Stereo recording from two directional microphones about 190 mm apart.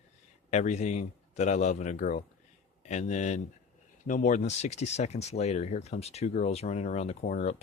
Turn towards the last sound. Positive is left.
turn(degrees=40)  # may be behind; listen again after turning